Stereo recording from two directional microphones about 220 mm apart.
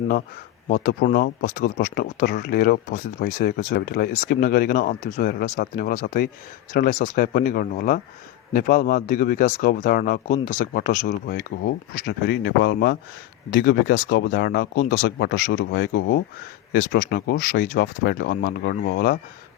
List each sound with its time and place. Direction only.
0.7 s speech: 45° left (ahead or behind)